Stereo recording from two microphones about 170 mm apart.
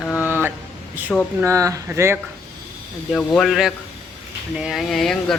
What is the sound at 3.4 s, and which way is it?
Speech, centre (ahead or behind).